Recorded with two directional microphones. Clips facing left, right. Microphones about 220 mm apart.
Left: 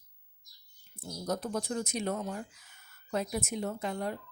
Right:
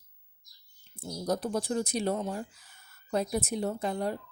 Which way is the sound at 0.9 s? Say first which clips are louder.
Right 4 dB; 30° right (ahead or behind).